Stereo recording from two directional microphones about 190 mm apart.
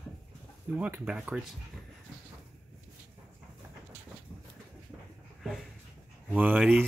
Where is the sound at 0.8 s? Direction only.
5° right (ahead or behind).